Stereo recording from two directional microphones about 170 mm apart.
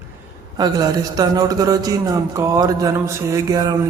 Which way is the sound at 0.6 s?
20° right (ahead or behind).